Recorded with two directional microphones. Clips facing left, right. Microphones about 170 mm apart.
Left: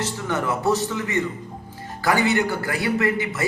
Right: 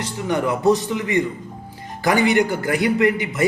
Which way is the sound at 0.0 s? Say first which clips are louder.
Right 3 dB; 15° right (ahead or behind).